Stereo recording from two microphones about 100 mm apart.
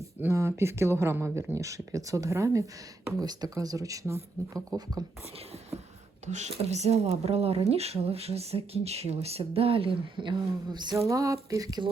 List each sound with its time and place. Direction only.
0.2 s speech: 25° right (ahead or behind)
6.6 s speech: 90° right; by 10.9 s 45° right (ahead or behind)
11.1 s speech: 35° right (ahead or behind)